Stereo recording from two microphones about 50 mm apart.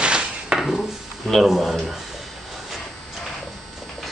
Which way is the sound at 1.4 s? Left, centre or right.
Centre.